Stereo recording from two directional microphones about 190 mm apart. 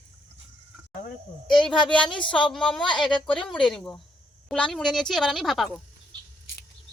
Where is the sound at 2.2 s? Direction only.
25° left (ahead or behind).